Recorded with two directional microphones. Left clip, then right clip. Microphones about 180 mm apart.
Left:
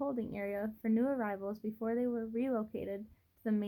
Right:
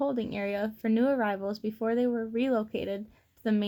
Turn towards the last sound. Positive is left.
turn(degrees=-35)  # may be behind; listen again after turning